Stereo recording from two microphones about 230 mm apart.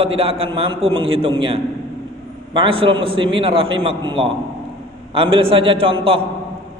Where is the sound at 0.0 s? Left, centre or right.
Right.